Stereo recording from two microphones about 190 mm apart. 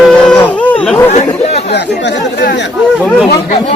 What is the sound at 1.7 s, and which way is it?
Speech, 65° left (ahead or behind).